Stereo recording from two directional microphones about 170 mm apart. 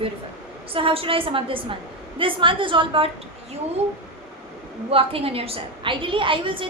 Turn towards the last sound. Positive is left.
turn(degrees=-30)  # may be behind; listen again after turning